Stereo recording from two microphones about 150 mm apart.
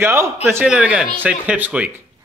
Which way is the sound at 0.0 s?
15° right (ahead or behind).